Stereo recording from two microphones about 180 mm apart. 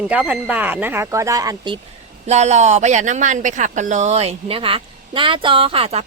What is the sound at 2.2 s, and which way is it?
Speech, 40° right (ahead or behind).